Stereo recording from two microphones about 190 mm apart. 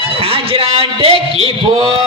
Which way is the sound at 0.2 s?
30° right (ahead or behind).